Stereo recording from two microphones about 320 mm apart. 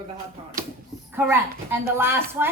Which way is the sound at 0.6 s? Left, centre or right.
Right.